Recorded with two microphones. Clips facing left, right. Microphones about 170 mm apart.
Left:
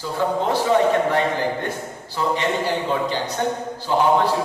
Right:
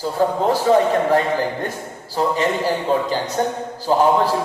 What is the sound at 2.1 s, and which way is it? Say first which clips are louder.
A man's voice: right 3 dB; 40° right (ahead or behind).